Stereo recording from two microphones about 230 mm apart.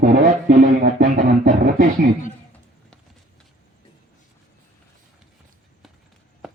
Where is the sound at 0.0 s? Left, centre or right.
Right.